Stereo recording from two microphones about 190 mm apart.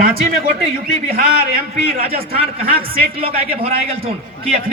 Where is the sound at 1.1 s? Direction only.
50° right (ahead or behind).